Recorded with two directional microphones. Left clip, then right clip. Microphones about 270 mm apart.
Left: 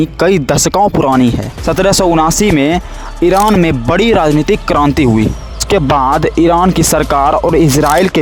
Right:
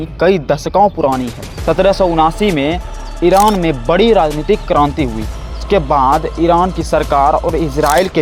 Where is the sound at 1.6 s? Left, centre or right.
Left.